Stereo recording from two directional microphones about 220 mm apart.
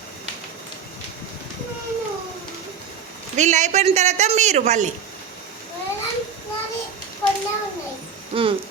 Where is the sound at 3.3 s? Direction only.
35° right (ahead or behind).